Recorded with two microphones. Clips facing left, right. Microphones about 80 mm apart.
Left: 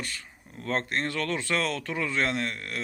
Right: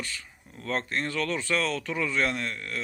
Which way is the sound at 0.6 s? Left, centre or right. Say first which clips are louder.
Left 1 dB; left.